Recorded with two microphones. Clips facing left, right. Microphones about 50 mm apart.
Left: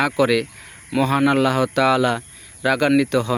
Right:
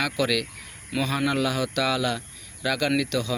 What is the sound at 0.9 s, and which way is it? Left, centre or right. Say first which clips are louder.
Speech: left 8 dB; left.